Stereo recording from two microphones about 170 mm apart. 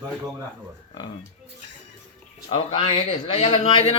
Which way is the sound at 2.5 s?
35° left (ahead or behind).